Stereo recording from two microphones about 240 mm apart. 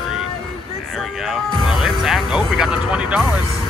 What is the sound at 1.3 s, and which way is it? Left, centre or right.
Speech, centre.